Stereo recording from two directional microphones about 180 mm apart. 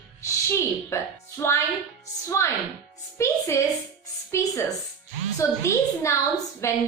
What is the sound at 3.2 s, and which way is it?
A woman's voice, 15° left (ahead or behind).